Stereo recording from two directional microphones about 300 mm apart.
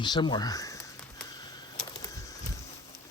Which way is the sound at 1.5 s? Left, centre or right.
Centre.